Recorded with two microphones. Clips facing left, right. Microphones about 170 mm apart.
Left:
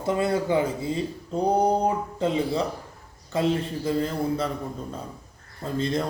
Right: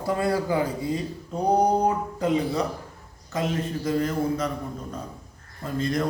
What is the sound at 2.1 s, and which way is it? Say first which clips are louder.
A man's voice: even; 25° left (ahead or behind).